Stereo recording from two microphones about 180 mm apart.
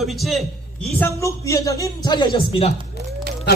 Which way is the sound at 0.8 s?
10° left (ahead or behind).